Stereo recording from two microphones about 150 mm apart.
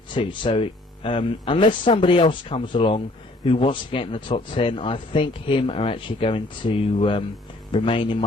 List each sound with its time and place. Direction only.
0.1 s speech: 35° left (ahead or behind)